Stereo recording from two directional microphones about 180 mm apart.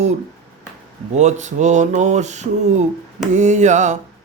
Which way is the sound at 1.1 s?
40° right (ahead or behind).